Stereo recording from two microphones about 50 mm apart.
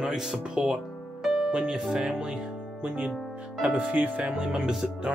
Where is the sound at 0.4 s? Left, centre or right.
Right.